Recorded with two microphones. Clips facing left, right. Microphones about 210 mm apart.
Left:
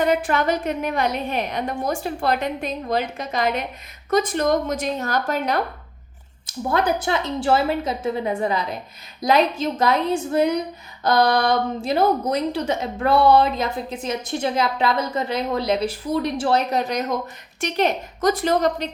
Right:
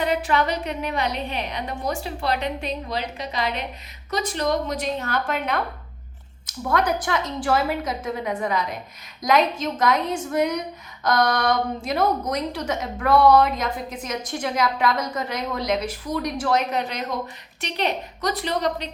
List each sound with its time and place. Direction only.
0.0 s a woman's voice: 50° left (ahead or behind)